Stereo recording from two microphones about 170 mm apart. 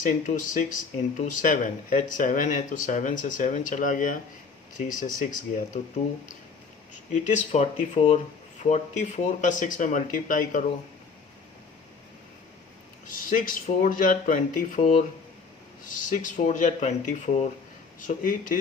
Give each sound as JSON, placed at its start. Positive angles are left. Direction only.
{"t": 0.0, "sound": "speech", "side_deg": 50}
{"t": 7.1, "sound": "speech", "side_deg": 45}
{"t": 13.3, "sound": "speech", "side_deg": 55}